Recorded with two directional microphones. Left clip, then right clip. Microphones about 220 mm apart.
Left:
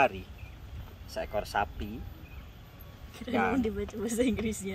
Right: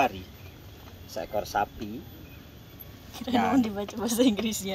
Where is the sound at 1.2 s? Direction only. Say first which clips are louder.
Right 3 dB; 20° left (ahead or behind).